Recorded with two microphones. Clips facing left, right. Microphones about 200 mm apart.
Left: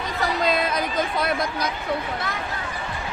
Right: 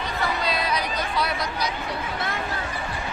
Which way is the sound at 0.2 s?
50° left (ahead or behind).